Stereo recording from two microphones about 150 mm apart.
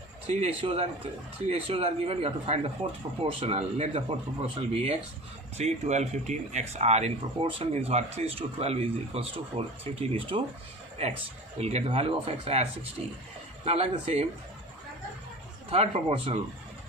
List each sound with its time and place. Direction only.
0.3 s speech: 40° right (ahead or behind)
2.8 s speech: 55° right (ahead or behind)
3.2 s speech: 40° right (ahead or behind)
15.7 s speech: 40° right (ahead or behind)